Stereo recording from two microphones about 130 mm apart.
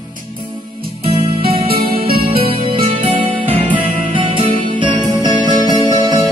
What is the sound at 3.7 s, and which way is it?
Music, 40° right (ahead or behind).